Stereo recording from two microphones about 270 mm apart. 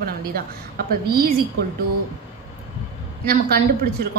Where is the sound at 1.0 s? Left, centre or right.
Right.